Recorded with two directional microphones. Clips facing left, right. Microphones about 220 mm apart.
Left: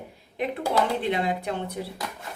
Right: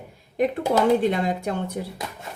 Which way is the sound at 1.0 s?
45° right (ahead or behind).